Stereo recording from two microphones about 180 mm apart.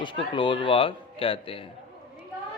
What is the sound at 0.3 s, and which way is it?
Speech, 30° left (ahead or behind).